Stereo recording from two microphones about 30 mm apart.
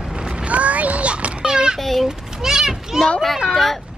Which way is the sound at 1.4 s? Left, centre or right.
Right.